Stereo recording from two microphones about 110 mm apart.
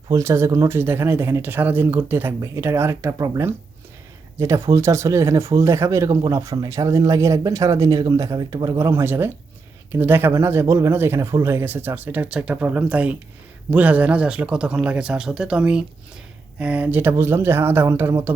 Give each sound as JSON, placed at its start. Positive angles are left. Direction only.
{"t": 0.1, "sound": "speech", "side_deg": -25}